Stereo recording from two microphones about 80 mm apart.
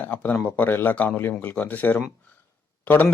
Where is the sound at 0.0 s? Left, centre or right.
Left.